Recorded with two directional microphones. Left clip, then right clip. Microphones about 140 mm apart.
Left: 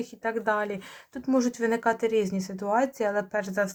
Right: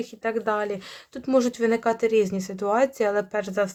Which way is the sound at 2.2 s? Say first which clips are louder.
Right 3 dB; 80° right.